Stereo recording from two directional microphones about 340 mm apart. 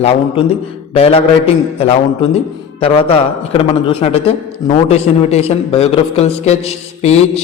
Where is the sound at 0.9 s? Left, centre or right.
Centre.